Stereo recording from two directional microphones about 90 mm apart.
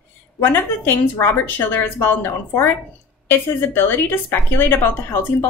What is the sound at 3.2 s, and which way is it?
A woman's voice, 25° left (ahead or behind).